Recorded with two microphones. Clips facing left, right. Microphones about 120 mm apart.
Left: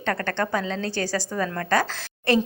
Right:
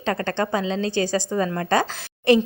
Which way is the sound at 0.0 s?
15° right (ahead or behind).